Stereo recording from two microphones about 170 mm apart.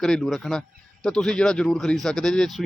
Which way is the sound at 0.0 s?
Centre (ahead or behind).